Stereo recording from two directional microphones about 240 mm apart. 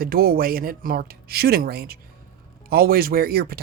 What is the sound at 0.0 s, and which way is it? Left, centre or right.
Speech, right.